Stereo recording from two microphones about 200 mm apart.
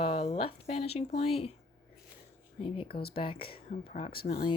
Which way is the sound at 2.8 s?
50° left (ahead or behind).